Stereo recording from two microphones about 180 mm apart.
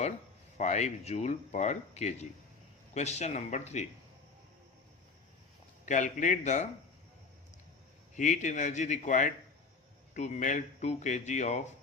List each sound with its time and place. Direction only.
0.5 s speech: 40° left (ahead or behind)
5.8 s speech: 45° left (ahead or behind)
8.1 s speech: 45° left (ahead or behind)